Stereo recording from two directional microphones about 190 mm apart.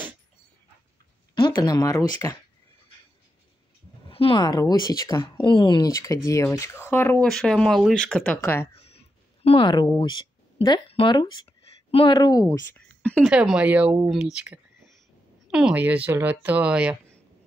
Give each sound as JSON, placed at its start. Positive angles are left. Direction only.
{"t": 1.3, "sound": "speech", "side_deg": 20}
{"t": 4.1, "sound": "speech", "side_deg": 30}
{"t": 8.7, "sound": "speech", "side_deg": 30}
{"t": 12.7, "sound": "speech", "side_deg": 5}
{"t": 13.3, "sound": "speech", "side_deg": -5}